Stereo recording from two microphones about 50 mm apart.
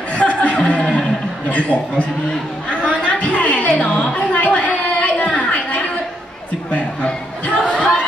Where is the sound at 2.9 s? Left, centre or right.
Left.